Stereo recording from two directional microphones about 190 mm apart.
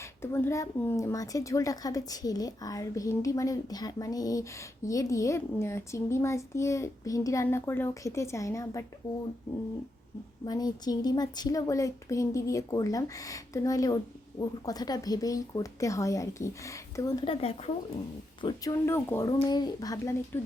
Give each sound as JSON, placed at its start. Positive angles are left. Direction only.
{"t": 0.0, "sound": "a woman's voice", "side_deg": 15}
{"t": 10.4, "sound": "a woman's voice", "side_deg": 20}
{"t": 18.4, "sound": "a woman's voice", "side_deg": 15}